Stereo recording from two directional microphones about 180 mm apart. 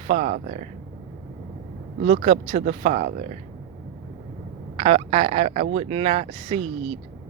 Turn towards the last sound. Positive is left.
turn(degrees=-35)  # may be behind; listen again after turning